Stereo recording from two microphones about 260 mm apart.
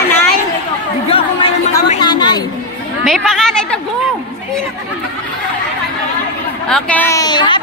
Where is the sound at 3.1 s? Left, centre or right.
Centre.